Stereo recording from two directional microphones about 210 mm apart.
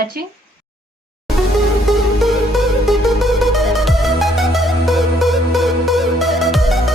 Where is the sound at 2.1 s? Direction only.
Centre (ahead or behind).